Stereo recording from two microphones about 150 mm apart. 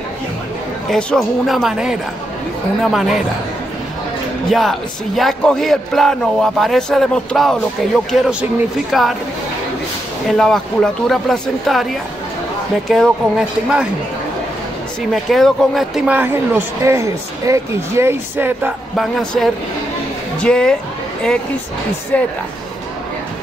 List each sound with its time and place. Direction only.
0.8 s speech: 5° left (ahead or behind)
4.5 s speech: centre (ahead or behind)
10.2 s speech: 5° left (ahead or behind)
15.2 s speech: centre (ahead or behind)
16.2 s speech: 15° right (ahead or behind)
18.9 s a woman's voice: centre (ahead or behind)
22.1 s a woman's voice: 10° left (ahead or behind)